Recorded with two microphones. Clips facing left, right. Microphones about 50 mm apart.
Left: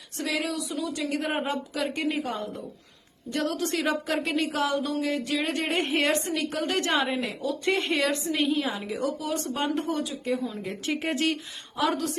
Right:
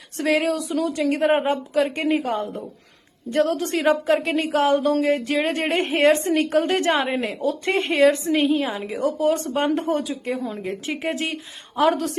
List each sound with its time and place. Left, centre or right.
0.2 s a woman's voice: right
8.6 s a woman's voice: centre
8.9 s a woman's voice: right
11.8 s a woman's voice: right